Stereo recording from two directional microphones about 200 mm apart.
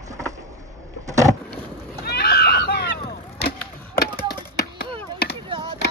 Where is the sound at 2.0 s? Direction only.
55° left (ahead or behind).